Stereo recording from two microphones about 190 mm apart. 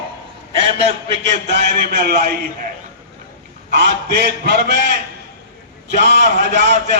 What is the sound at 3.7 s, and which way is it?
A man's voice, 60° right (ahead or behind).